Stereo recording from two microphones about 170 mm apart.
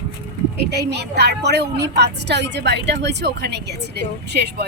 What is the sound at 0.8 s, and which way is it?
A woman's voice, 75° right (ahead or behind).